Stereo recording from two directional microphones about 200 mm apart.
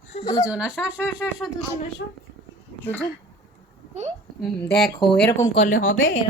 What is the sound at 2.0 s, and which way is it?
Speech, 65° left (ahead or behind).